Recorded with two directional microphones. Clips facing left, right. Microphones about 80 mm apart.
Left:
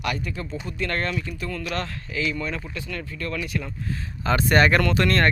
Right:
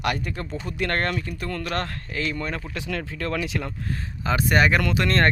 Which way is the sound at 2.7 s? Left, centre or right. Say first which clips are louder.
Right 3 dB; right.